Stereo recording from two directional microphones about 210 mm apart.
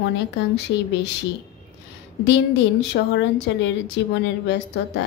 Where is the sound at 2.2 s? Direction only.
55° left (ahead or behind).